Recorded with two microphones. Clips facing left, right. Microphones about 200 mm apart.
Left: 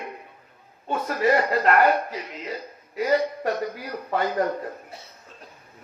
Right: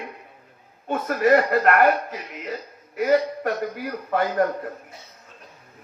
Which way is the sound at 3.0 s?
55° right (ahead or behind).